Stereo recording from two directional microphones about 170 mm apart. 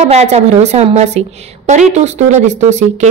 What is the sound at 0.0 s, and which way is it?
A woman's voice, 40° right (ahead or behind).